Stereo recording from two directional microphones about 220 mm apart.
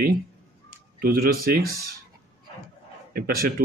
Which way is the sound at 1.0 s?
40° right (ahead or behind).